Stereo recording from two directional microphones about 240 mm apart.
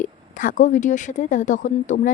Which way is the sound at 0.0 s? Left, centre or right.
Left.